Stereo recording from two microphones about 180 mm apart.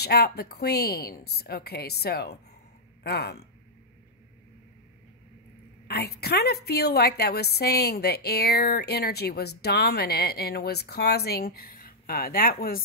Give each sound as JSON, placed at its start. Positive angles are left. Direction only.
{"t": 0.0, "sound": "a woman's voice", "side_deg": 65}
{"t": 5.9, "sound": "a woman's voice", "side_deg": 60}